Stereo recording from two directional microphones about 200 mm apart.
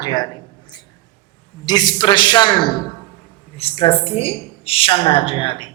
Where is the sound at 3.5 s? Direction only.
30° left (ahead or behind).